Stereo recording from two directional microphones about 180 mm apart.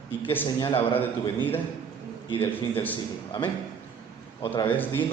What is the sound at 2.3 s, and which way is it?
Speech, 25° left (ahead or behind).